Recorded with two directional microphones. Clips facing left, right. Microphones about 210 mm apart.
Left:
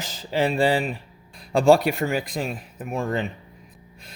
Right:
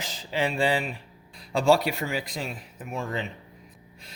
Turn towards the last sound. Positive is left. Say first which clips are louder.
# left 6 dB
turn(degrees=50)  # may be behind; listen again after turning